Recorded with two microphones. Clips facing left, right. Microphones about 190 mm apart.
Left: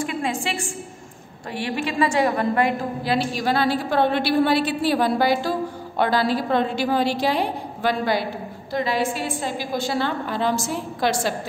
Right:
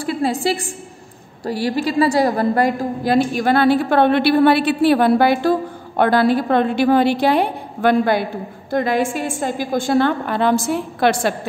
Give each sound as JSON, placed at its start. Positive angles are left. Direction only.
{"t": 0.0, "sound": "a woman's voice", "side_deg": -35}